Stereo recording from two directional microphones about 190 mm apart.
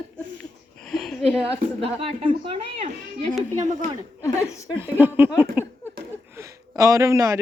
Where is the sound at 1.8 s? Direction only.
30° right (ahead or behind).